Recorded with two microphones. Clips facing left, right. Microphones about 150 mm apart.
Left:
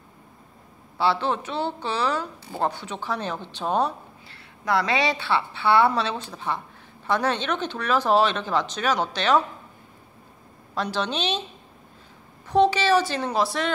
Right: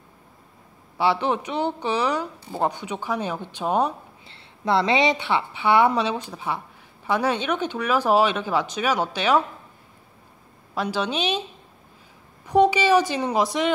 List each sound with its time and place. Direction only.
0.9 s a woman's voice: 15° right (ahead or behind)
4.3 s a woman's voice: 25° right (ahead or behind)
10.7 s a woman's voice: 10° right (ahead or behind)
12.4 s a woman's voice: 10° right (ahead or behind)